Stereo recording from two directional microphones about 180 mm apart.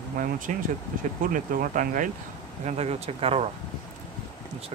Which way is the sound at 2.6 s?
35° right (ahead or behind).